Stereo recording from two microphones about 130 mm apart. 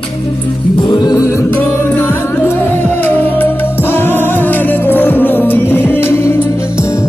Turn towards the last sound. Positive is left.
turn(degrees=20)  # may be behind; listen again after turning